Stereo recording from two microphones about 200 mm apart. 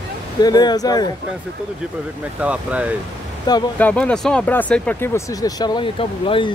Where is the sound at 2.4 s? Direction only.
5° right (ahead or behind).